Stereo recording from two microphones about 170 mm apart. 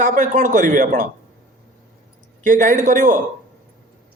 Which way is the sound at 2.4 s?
50° right (ahead or behind).